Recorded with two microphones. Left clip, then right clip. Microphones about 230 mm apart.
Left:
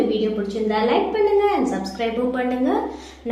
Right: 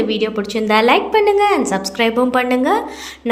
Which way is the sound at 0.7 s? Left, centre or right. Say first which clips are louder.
Right 8 dB; right.